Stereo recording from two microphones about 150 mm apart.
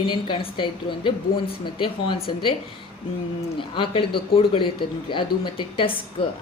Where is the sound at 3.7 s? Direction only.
35° left (ahead or behind).